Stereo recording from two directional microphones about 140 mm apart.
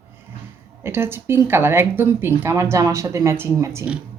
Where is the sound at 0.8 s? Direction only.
15° right (ahead or behind).